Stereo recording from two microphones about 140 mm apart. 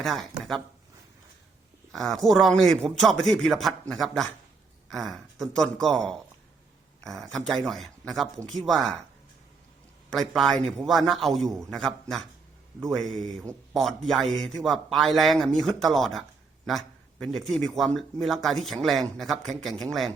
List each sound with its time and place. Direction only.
0.0 s a man's voice: centre (ahead or behind)
1.9 s a man's voice: centre (ahead or behind)
10.1 s a man's voice: centre (ahead or behind)
11.4 s speech: 25° right (ahead or behind)
11.7 s a man's voice: 5° left (ahead or behind)
13.2 s speech: 25° right (ahead or behind)
13.7 s a man's voice: centre (ahead or behind)